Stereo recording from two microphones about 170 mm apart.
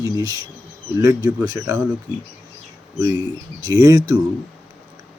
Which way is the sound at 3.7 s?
20° right (ahead or behind).